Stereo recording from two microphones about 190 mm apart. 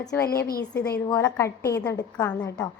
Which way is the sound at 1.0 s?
15° left (ahead or behind).